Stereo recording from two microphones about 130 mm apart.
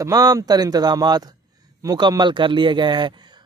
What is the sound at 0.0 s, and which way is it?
A man's voice, 25° right (ahead or behind).